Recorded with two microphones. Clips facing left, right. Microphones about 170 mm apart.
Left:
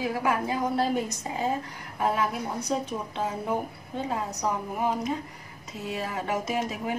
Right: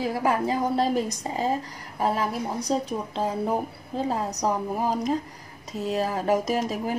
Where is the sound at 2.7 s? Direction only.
35° right (ahead or behind).